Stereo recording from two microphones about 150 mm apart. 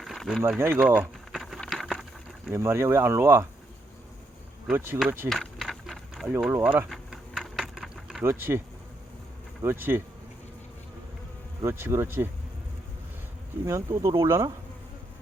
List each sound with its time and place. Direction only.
0.0 s a sound: centre (ahead or behind)
0.6 s speech: 15° right (ahead or behind)
1.3 s a sound: centre (ahead or behind)
2.5 s speech: 15° right (ahead or behind)
4.7 s speech: 15° right (ahead or behind)
5.3 s a sound: centre (ahead or behind)
6.5 s speech: 10° right (ahead or behind)
6.9 s bee: centre (ahead or behind)
8.2 s speech: 15° right (ahead or behind)
9.6 s insect: 15° right (ahead or behind)
11.6 s speech: 15° right (ahead or behind)
13.7 s speech: 20° right (ahead or behind)